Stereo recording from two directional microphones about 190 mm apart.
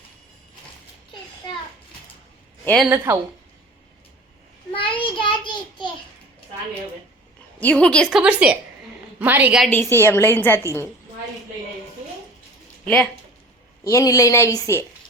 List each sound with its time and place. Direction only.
2.6 s a woman's voice: centre (ahead or behind)
4.7 s child singing: 25° left (ahead or behind)
7.6 s a woman's voice: 5° left (ahead or behind)
8.2 s a woman's voice: 5° right (ahead or behind)
9.7 s a woman's voice: 10° left (ahead or behind)
12.8 s a woman's voice: 5° left (ahead or behind)